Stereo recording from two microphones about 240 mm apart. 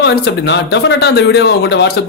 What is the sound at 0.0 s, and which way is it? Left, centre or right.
Speech, left.